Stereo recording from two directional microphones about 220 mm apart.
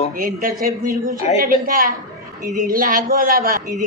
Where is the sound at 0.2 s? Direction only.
40° right (ahead or behind).